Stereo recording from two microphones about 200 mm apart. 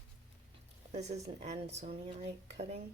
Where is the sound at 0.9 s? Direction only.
35° right (ahead or behind).